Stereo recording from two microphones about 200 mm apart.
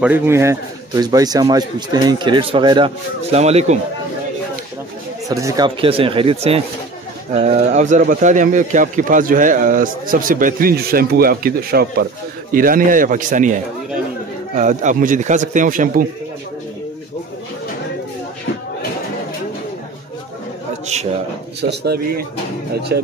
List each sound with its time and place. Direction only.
0.0 s speech: 10° right (ahead or behind); by 3.7 s 35° right (ahead or behind)
5.3 s a man's voice: 15° right (ahead or behind); by 16.1 s 40° right (ahead or behind)
20.8 s speech: 35° right (ahead or behind)
21.6 s speech: 50° right (ahead or behind)